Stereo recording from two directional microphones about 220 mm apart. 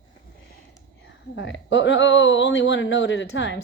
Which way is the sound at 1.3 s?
55° left (ahead or behind).